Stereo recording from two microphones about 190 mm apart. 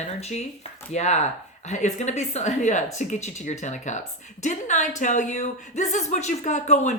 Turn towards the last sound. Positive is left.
turn(degrees=35)  # may be behind; listen again after turning